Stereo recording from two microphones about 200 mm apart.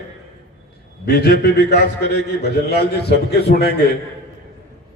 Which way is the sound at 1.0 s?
50° left (ahead or behind).